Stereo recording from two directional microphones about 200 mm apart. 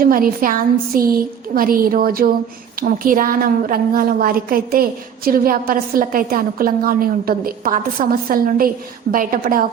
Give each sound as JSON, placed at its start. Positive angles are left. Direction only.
{"t": 0.0, "sound": "a woman's voice", "side_deg": -45}